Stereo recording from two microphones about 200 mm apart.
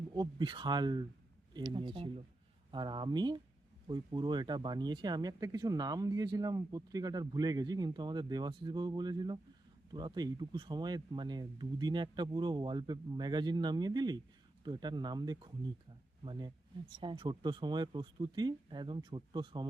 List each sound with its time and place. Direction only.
0.1 s speech: 20° right (ahead or behind)